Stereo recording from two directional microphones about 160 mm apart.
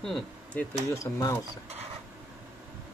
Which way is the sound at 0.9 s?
20° left (ahead or behind).